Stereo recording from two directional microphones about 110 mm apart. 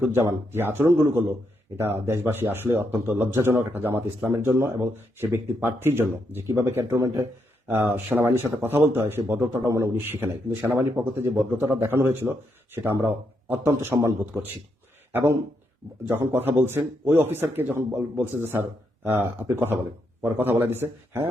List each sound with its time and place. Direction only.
0.1 s speech: 20° right (ahead or behind)
15.1 s speech: 25° right (ahead or behind)